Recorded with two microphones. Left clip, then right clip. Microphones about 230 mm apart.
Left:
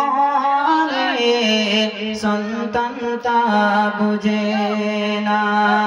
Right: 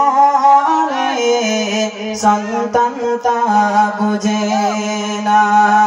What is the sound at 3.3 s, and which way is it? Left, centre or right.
Mantra, right.